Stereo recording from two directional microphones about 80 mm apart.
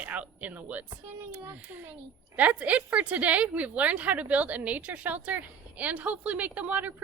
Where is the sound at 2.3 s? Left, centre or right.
Centre.